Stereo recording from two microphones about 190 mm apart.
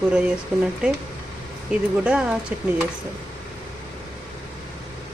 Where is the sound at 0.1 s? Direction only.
5° right (ahead or behind).